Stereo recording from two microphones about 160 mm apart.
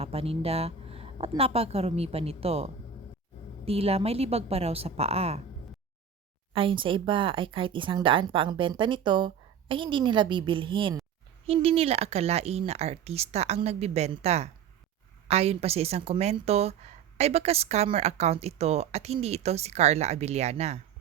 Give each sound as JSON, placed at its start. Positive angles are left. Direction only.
{"t": 0.0, "sound": "a sound", "side_deg": -40}
{"t": 1.4, "sound": "a woman's voice", "side_deg": -40}
{"t": 6.5, "sound": "a woman's voice", "side_deg": -35}